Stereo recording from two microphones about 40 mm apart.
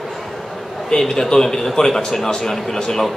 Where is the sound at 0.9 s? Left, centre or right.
Centre.